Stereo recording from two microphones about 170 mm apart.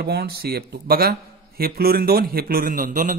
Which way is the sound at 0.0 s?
65° right (ahead or behind).